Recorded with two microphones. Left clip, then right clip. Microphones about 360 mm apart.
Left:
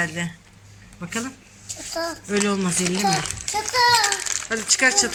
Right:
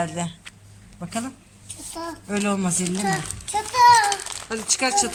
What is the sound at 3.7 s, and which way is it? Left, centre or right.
Speech, centre.